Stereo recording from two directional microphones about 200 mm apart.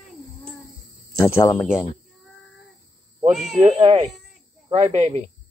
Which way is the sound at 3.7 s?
25° right (ahead or behind).